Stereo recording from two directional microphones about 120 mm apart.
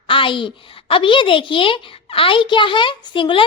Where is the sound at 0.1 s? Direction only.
45° left (ahead or behind).